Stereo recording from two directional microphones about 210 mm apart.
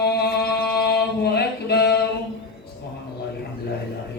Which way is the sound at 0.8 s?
50° left (ahead or behind).